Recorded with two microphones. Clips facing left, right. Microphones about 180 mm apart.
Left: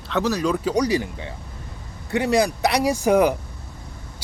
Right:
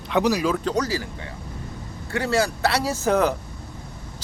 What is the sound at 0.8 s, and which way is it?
Speech, 20° left (ahead or behind).